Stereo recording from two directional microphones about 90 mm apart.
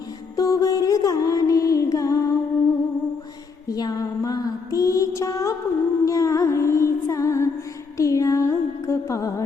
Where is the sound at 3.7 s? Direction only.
45° left (ahead or behind).